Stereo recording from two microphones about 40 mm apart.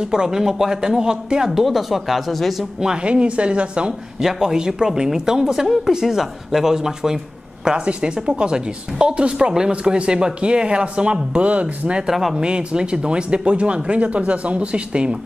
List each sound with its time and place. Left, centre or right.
0.0 s speech: centre
1.6 s speech: centre
2.8 s speech: centre
3.1 s speech: right
4.2 s speech: centre; by 12.0 s right
12.1 s speech: centre
12.4 s speech: right